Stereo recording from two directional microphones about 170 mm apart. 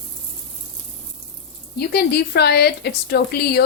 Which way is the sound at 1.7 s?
70° left (ahead or behind).